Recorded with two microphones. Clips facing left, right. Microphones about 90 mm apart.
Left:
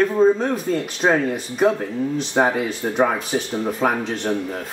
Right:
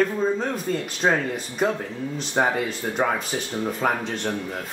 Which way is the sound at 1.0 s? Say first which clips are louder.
Left 3 dB; 10° left (ahead or behind).